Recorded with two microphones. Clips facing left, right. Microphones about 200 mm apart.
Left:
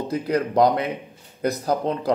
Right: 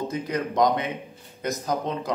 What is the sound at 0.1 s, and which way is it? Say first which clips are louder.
A man's voice: left 5 dB; 35° left (ahead or behind).